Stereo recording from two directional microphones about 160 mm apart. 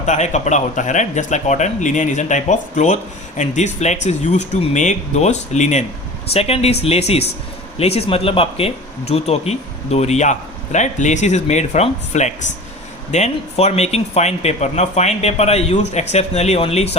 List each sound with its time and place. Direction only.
0.0 s speech: 45° left (ahead or behind)